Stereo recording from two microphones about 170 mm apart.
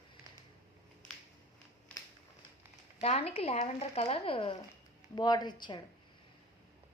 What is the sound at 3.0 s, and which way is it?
A woman's voice, 35° left (ahead or behind).